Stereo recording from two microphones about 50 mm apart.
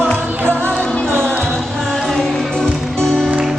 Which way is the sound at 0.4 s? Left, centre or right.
Right.